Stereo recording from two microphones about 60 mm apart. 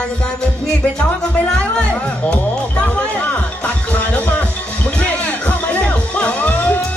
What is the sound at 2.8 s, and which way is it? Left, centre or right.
Music, left.